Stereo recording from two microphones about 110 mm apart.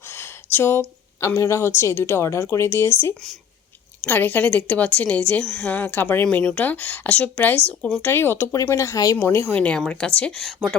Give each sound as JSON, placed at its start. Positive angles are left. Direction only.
{"t": 0.1, "sound": "speech", "side_deg": 20}
{"t": 8.0, "sound": "speech", "side_deg": 20}
{"t": 9.6, "sound": "speech", "side_deg": 10}